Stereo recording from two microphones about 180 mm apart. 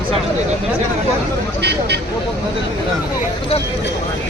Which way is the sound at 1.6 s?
70° right (ahead or behind).